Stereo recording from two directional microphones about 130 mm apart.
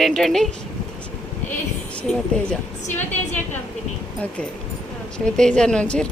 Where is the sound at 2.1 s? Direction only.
5° left (ahead or behind).